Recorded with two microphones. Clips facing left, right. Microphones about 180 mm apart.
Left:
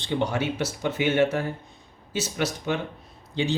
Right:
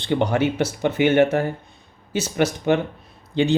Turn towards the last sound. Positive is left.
turn(degrees=-60)  # may be behind; listen again after turning